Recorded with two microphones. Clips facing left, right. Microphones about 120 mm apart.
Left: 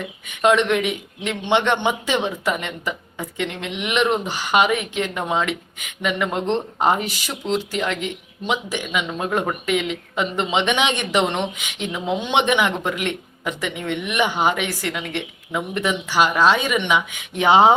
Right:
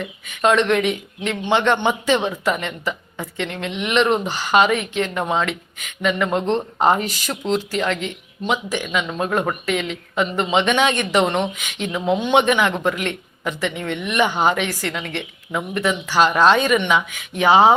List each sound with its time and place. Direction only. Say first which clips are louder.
0.4 s speech: right 1 dB; 15° left (ahead or behind)